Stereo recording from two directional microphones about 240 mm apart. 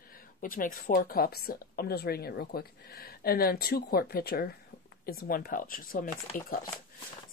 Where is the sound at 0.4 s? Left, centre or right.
Left.